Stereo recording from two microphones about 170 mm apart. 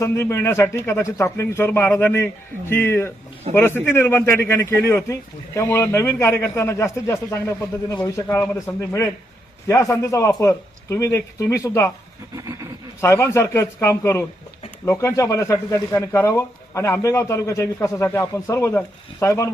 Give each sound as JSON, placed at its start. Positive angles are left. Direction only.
{"t": 0.0, "sound": "speech", "side_deg": 15}
{"t": 13.0, "sound": "speech", "side_deg": 15}